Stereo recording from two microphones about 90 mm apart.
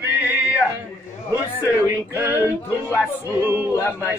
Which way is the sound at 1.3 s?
25° right (ahead or behind).